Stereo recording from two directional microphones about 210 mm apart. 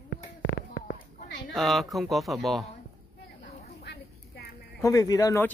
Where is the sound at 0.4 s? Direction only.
65° left (ahead or behind).